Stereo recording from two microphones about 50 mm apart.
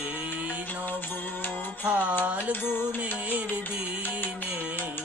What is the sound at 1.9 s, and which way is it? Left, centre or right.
Music, right.